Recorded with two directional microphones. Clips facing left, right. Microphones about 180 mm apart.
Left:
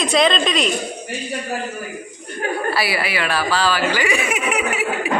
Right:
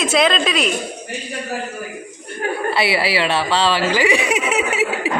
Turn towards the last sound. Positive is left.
turn(degrees=-20)  # may be behind; listen again after turning